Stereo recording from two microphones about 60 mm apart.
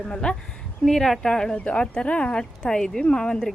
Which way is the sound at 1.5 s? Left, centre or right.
Left.